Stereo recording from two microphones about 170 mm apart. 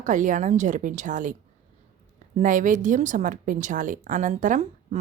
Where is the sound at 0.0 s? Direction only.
50° right (ahead or behind).